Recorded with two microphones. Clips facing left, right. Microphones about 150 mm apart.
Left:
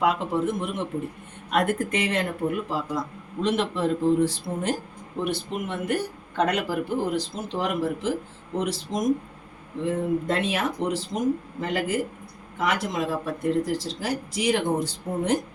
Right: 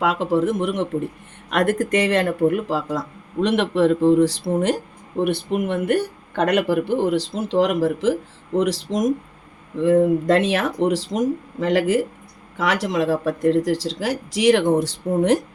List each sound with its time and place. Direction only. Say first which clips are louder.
0.0 s speech: right 4 dB; 90° right
3.4 s a man's voice: right 6 dB; 70° right (ahead or behind)
5.2 s speech: right 7 dB; 60° right (ahead or behind); by 9.0 s 90° right
9.8 s speech: right 9 dB; 80° right